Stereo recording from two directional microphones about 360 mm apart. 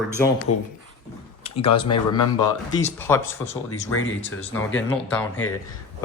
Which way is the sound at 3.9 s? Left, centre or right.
Left.